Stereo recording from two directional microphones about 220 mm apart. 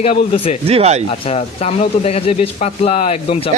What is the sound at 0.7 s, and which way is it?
Speech, 30° right (ahead or behind).